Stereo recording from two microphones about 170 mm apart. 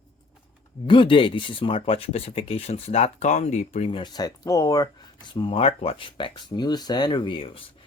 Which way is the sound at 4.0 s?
25° left (ahead or behind).